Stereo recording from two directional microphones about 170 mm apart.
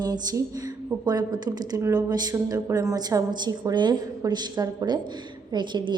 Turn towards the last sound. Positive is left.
turn(degrees=-25)  # may be behind; listen again after turning